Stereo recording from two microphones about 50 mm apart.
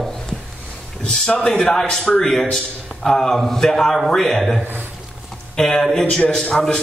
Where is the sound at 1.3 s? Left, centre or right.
Left.